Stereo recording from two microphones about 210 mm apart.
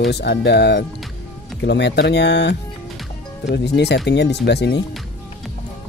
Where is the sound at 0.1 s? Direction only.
55° left (ahead or behind).